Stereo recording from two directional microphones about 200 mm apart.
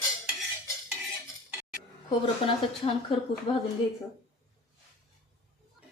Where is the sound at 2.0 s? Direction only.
25° left (ahead or behind).